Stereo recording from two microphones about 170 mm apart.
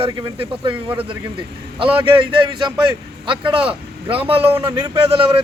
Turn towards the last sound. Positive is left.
turn(degrees=-30)  # may be behind; listen again after turning